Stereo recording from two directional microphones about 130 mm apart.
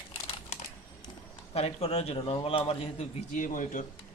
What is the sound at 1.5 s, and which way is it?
A man's voice, 50° left (ahead or behind).